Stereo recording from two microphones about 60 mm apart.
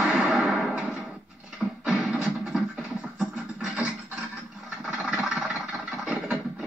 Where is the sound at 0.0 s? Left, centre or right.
Right.